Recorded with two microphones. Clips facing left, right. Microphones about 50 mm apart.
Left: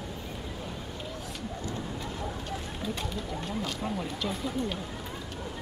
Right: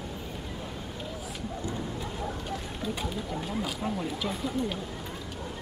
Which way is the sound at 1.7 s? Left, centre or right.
Centre.